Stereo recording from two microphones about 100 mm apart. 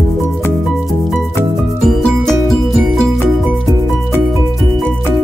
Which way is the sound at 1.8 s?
5° left (ahead or behind).